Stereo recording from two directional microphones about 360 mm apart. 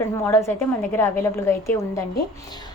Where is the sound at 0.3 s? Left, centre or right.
Centre.